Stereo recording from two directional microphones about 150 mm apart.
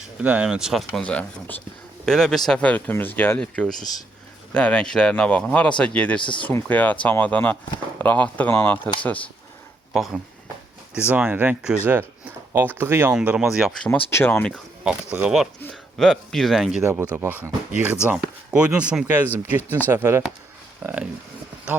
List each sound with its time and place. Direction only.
0.2 s speech: 10° right (ahead or behind); by 9.3 s 10° left (ahead or behind)
9.9 s speech: centre (ahead or behind); by 13.1 s 15° right (ahead or behind)
13.1 s speech: 5° right (ahead or behind)
14.8 s speech: 5° right (ahead or behind)
17.0 s speech: 15° right (ahead or behind)